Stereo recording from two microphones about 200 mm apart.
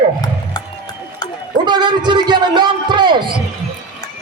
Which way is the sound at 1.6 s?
20° right (ahead or behind).